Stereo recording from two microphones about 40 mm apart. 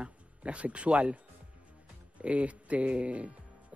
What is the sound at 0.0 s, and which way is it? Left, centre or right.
Speech, right.